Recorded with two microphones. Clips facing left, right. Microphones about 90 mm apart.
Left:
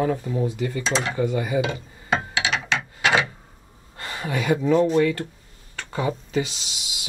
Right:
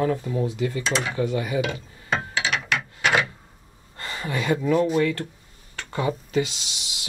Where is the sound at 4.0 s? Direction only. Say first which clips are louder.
Left 1 dB; 10° left (ahead or behind).